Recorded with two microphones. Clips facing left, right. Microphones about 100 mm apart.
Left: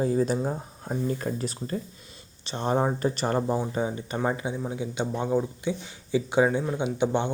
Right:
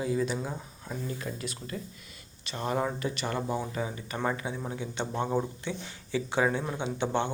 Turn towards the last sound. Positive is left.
turn(degrees=15)  # may be behind; listen again after turning